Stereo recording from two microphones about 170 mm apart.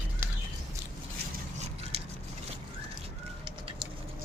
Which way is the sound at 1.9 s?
40° right (ahead or behind).